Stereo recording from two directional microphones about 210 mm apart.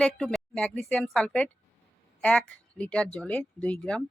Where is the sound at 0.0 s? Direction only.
5° left (ahead or behind).